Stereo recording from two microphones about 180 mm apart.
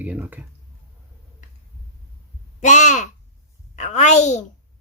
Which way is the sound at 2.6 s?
40° left (ahead or behind).